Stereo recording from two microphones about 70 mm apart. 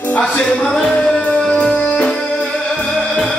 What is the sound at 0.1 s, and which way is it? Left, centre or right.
Music, centre.